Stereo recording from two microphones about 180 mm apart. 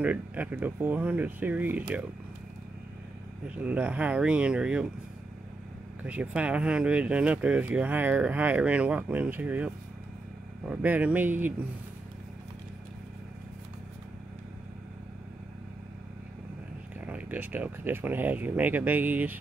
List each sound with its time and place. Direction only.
0.0 s speech: 10° right (ahead or behind)
3.5 s speech: 10° right (ahead or behind)
6.0 s speech: 10° right (ahead or behind)
10.7 s speech: 10° right (ahead or behind)
17.0 s speech: 10° right (ahead or behind)